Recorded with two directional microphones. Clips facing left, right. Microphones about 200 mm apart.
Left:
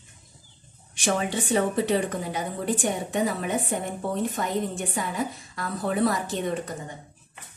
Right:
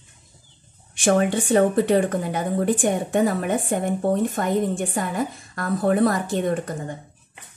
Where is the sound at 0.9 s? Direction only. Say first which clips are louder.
Right 7 dB; 55° right (ahead or behind).